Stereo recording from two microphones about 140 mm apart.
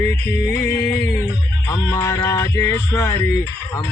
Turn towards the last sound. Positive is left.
turn(degrees=20)  # may be behind; listen again after turning